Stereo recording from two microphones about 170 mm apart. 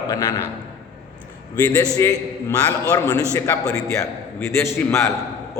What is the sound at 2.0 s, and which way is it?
A man's voice, 15° left (ahead or behind).